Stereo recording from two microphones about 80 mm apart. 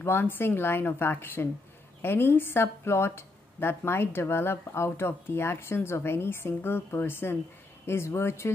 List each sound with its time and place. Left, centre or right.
0.0 s a woman's voice: left